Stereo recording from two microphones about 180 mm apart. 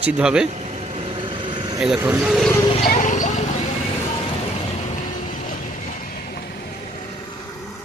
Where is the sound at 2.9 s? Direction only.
45° left (ahead or behind).